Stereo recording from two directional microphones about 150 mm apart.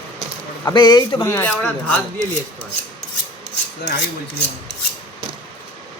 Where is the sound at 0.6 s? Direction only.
30° left (ahead or behind).